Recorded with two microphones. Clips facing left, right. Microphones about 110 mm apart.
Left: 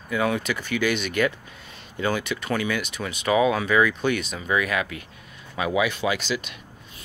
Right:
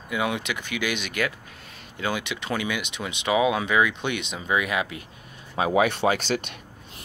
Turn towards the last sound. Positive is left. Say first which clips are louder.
# right 2 dB
turn(degrees=-50)  # may be behind; listen again after turning